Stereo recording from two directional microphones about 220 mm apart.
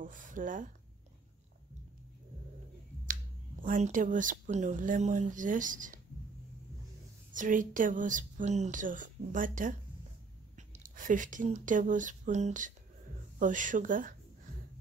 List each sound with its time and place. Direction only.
0.0 s speech: 35° right (ahead or behind)
3.6 s a woman's voice: 35° right (ahead or behind)
7.3 s a woman's voice: 35° right (ahead or behind)
10.8 s a woman's voice: 35° right (ahead or behind)